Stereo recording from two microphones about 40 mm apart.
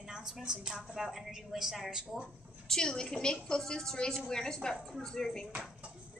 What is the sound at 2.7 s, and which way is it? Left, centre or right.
A woman's voice, centre.